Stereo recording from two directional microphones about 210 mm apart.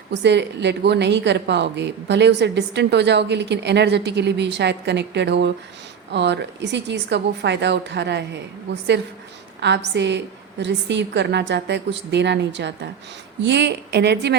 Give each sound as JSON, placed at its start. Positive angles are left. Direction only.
{"t": 0.1, "sound": "a woman's voice", "side_deg": -55}